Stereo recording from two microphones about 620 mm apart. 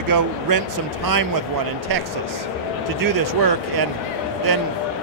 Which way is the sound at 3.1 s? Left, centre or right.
Right.